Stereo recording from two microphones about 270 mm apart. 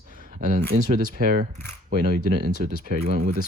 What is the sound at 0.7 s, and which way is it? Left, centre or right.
Speech, right.